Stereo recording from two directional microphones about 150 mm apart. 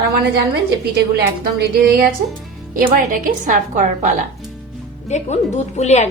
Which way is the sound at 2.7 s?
60° right (ahead or behind).